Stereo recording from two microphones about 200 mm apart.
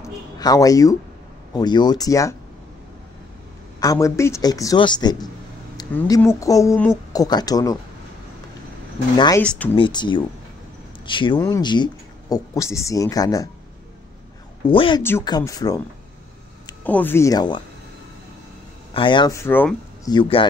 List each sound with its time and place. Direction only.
0.0 s a sound: 20° left (ahead or behind)
1.5 s speech: 20° left (ahead or behind)
3.8 s speech: 15° left (ahead or behind)
9.1 s speech: 20° left (ahead or behind)
9.4 s speech: 5° left (ahead or behind)
9.8 s speech: 25° left (ahead or behind)
14.7 s speech: 25° left (ahead or behind)
16.8 s speech: 10° left (ahead or behind)
18.9 s speech: 25° left (ahead or behind)
20.1 s speech: 25° left (ahead or behind)